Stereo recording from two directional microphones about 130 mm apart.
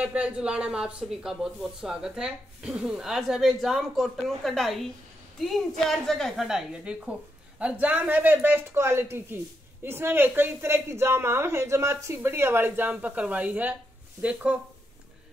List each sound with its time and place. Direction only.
0.0 s a woman's voice: 10° right (ahead or behind)